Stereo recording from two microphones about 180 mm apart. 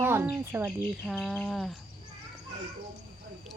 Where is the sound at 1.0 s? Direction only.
Centre (ahead or behind).